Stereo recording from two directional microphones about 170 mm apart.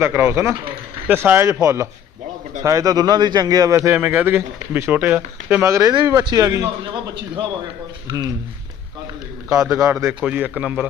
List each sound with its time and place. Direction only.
0.0 s a man's voice: 15° right (ahead or behind)
9.5 s a man's voice: 20° right (ahead or behind); by 10.8 s 5° right (ahead or behind)